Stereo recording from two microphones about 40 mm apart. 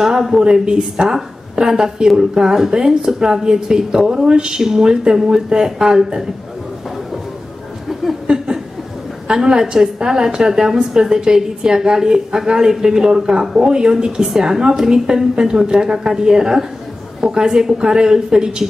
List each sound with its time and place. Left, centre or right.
0.0 s a woman's voice: centre
0.4 s a woman's voice: right
7.9 s chuckle: centre
9.3 s a woman's voice: centre